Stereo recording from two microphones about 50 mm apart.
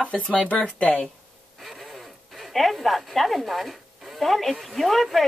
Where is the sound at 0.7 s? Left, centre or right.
Left.